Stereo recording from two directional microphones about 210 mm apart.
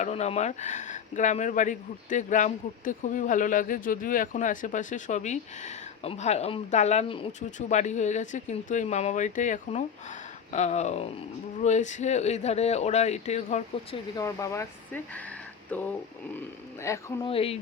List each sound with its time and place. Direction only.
0.0 s speech: 30° left (ahead or behind)
14.2 s speech: 15° left (ahead or behind)
17.2 s speech: 25° left (ahead or behind)